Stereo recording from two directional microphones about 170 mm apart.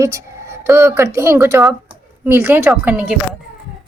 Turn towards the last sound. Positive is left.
turn(degrees=-10)  # may be behind; listen again after turning